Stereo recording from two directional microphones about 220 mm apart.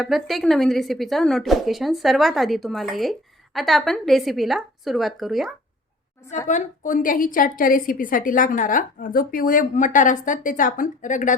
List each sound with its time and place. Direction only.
0.0 s a woman's voice: centre (ahead or behind)
6.5 s a woman's voice: 35° left (ahead or behind)